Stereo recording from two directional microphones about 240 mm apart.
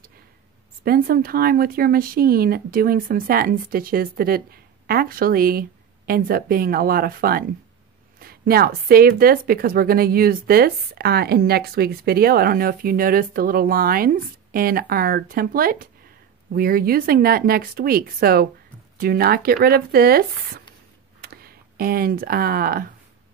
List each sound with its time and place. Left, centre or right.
0.8 s speech: right